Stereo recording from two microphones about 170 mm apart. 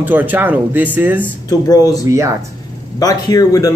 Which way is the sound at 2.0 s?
20° right (ahead or behind).